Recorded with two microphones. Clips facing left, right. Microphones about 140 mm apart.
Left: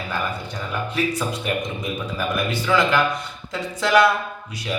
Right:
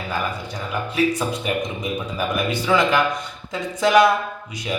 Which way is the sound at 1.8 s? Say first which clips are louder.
Right 1 dB; 20° right (ahead or behind).